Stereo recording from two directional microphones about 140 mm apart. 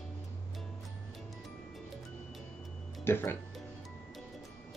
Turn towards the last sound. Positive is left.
turn(degrees=15)  # may be behind; listen again after turning